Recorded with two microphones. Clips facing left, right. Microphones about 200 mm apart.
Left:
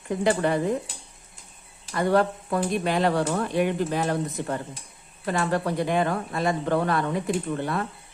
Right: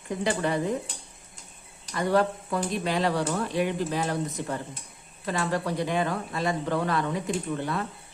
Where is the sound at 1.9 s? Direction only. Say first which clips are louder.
Left 2 dB; 50° left (ahead or behind).